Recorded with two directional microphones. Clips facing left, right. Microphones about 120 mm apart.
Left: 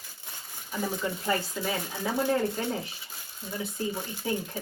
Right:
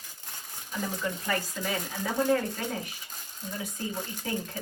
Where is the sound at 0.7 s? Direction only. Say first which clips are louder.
Left 2 dB; 15° left (ahead or behind).